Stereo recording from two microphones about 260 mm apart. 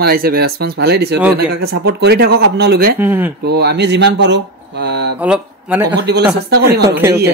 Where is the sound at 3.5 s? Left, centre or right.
Right.